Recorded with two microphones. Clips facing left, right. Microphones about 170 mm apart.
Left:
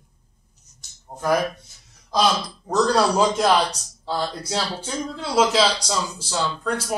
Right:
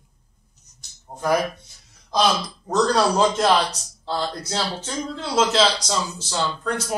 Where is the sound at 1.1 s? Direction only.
5° right (ahead or behind).